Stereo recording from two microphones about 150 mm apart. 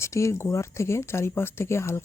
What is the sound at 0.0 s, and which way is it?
Speech, 20° left (ahead or behind).